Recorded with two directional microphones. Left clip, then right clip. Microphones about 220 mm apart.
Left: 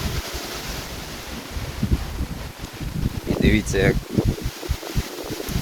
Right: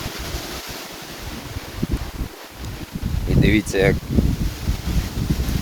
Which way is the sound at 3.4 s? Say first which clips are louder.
Right 2 dB; 30° right (ahead or behind).